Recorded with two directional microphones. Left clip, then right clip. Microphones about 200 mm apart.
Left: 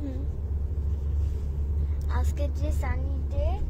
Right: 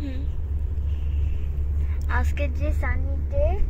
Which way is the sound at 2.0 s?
25° right (ahead or behind).